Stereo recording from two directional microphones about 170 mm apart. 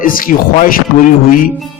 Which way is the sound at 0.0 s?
55° left (ahead or behind).